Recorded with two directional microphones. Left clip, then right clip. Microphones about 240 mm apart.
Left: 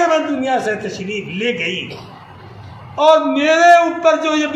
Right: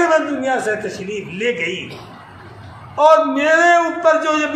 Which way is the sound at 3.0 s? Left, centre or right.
Centre.